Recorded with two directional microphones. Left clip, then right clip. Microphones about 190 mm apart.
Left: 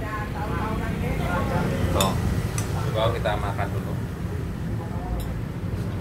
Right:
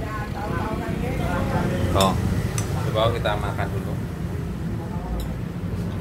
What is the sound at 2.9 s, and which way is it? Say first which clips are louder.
Speech: right 2 dB; 30° right (ahead or behind).